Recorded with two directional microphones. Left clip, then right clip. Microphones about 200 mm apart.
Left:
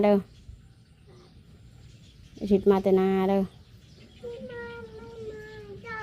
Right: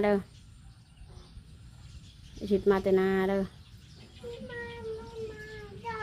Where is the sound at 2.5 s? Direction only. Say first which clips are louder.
Left 4 dB; 20° left (ahead or behind).